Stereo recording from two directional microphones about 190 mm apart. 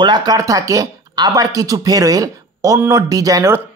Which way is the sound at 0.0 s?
20° right (ahead or behind).